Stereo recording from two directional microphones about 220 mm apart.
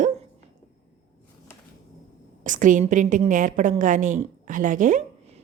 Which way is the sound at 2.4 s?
35° right (ahead or behind).